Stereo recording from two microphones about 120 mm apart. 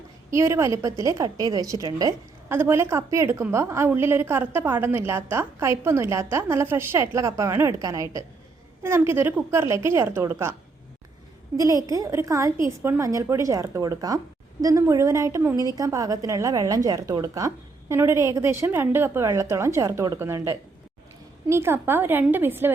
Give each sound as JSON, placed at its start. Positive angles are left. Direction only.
{"t": 0.3, "sound": "a woman's voice", "side_deg": -25}
{"t": 11.5, "sound": "a woman's voice", "side_deg": -25}